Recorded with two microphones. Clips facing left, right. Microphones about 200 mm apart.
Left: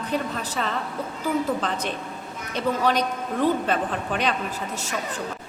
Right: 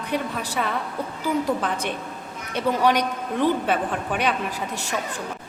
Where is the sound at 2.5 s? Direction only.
10° right (ahead or behind).